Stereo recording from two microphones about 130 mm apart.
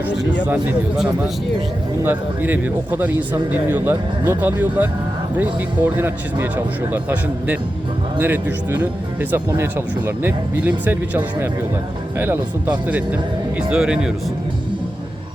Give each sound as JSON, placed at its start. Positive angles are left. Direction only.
{"t": 0.4, "sound": "speech", "side_deg": -10}
{"t": 2.0, "sound": "speech", "side_deg": -15}